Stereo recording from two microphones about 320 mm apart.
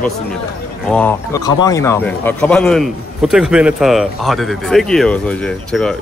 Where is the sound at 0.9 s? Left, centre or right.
Centre.